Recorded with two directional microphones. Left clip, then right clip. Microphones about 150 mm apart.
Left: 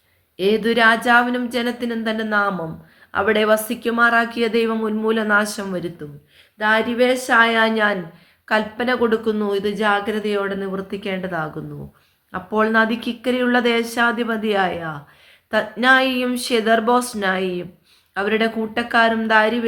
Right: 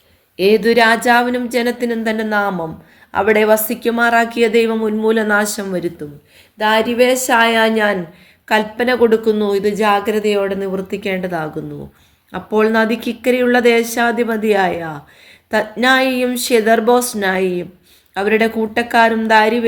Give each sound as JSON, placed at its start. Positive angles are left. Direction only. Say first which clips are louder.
{"t": 0.3, "sound": "speech", "louder": "right 6 dB", "side_deg": -45}
{"t": 6.6, "sound": "speech", "louder": "right 4 dB", "side_deg": -50}